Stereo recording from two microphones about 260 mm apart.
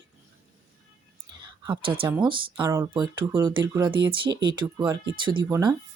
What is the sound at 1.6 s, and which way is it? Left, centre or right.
Speech, centre.